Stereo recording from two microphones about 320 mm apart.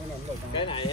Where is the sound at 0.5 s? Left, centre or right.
Centre.